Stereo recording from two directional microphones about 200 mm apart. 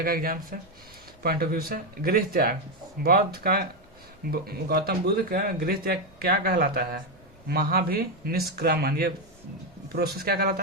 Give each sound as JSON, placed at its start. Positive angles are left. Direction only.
{"t": 0.0, "sound": "speech", "side_deg": -45}